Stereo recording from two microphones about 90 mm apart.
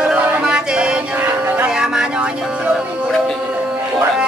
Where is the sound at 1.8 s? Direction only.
5° right (ahead or behind).